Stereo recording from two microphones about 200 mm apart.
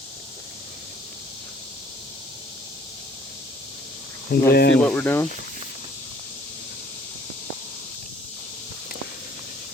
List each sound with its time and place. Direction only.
4.3 s speech: 50° left (ahead or behind)
4.8 s speech: 5° left (ahead or behind)